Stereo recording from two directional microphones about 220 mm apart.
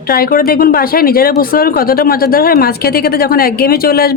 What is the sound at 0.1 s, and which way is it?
Speech, 40° left (ahead or behind).